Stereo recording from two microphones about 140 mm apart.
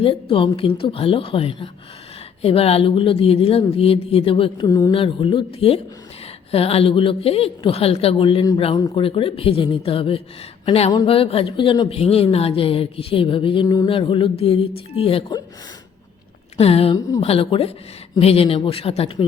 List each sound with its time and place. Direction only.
0.0 s a woman's voice: 40° left (ahead or behind)
16.6 s a woman's voice: 45° left (ahead or behind)